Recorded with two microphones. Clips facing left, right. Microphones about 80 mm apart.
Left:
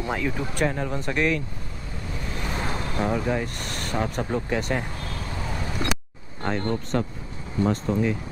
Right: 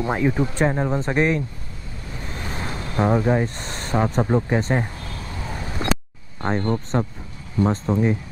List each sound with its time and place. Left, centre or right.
0.0 s speech: right
2.5 s vehicle: left
3.0 s speech: right
6.4 s speech: right